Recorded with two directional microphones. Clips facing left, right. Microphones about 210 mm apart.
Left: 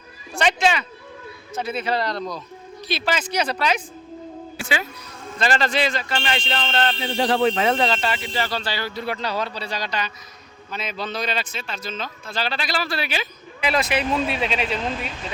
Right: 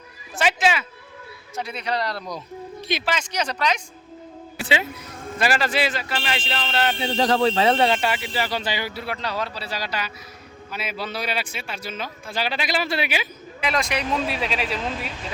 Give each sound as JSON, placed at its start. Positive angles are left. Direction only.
{"t": 0.3, "sound": "a sound", "side_deg": -5}
{"t": 1.5, "sound": "speech", "side_deg": 5}
{"t": 5.4, "sound": "speech", "side_deg": -10}
{"t": 7.0, "sound": "speech", "side_deg": -45}
{"t": 7.5, "sound": "speech", "side_deg": -30}
{"t": 7.9, "sound": "speech", "side_deg": -10}
{"t": 9.0, "sound": "speech", "side_deg": 0}
{"t": 13.6, "sound": "speech", "side_deg": 5}